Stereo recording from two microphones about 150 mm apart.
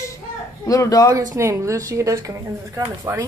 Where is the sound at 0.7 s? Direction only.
25° left (ahead or behind).